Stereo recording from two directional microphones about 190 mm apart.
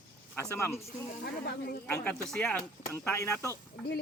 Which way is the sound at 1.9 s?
10° left (ahead or behind).